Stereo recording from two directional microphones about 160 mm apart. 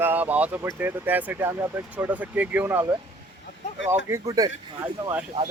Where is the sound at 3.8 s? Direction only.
20° right (ahead or behind).